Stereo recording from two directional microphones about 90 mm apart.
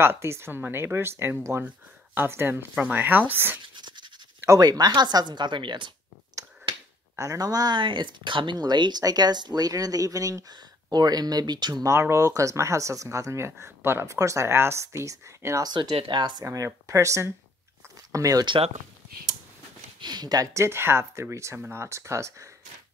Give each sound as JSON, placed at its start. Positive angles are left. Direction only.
{"t": 0.0, "sound": "speech", "side_deg": -25}
{"t": 3.6, "sound": "scratch", "side_deg": -60}
{"t": 4.5, "sound": "speech", "side_deg": -45}
{"t": 7.2, "sound": "speech", "side_deg": -40}
{"t": 8.5, "sound": "speech", "side_deg": -55}
{"t": 15.6, "sound": "speech", "side_deg": -50}
{"t": 15.9, "sound": "speech", "side_deg": -90}
{"t": 16.2, "sound": "speech", "side_deg": -55}
{"t": 16.4, "sound": "speech", "side_deg": -35}
{"t": 18.4, "sound": "speech", "side_deg": -60}
{"t": 20.0, "sound": "speech", "side_deg": -50}
{"t": 20.5, "sound": "speech", "side_deg": -30}